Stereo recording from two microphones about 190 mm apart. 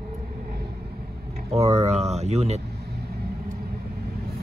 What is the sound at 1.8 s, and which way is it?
Speech, 35° right (ahead or behind).